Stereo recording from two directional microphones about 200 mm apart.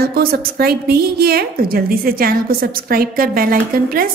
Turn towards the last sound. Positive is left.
turn(degrees=-45)  # may be behind; listen again after turning